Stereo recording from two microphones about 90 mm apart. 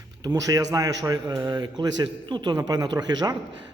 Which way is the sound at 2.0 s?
60° right (ahead or behind).